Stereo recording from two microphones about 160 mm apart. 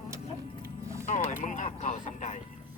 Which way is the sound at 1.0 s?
50° left (ahead or behind).